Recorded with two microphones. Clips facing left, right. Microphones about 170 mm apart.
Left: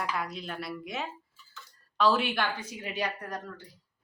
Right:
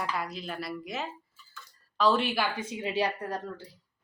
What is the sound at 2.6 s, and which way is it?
Speech, 25° right (ahead or behind).